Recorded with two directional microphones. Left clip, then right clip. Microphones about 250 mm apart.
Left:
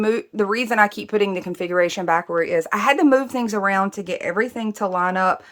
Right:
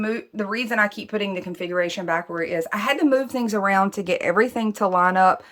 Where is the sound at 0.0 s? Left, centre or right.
Left.